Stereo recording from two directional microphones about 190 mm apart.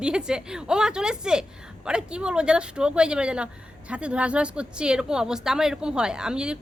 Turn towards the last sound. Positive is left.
turn(degrees=-5)  # may be behind; listen again after turning